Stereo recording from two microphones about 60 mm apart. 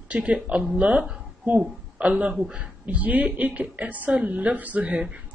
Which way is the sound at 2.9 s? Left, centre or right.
Right.